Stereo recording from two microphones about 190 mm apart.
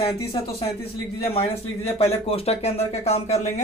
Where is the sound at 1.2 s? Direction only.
30° left (ahead or behind).